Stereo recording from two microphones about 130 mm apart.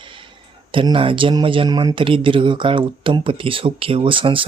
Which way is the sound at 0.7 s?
40° right (ahead or behind).